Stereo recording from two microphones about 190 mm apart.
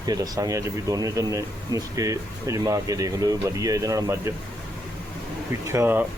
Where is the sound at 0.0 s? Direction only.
20° right (ahead or behind).